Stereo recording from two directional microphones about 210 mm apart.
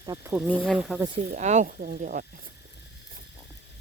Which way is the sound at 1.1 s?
35° right (ahead or behind).